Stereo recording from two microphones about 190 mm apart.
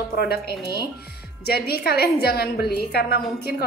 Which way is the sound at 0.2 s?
55° left (ahead or behind).